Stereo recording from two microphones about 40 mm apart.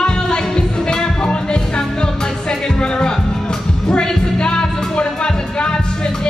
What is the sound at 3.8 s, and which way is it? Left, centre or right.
Music, left.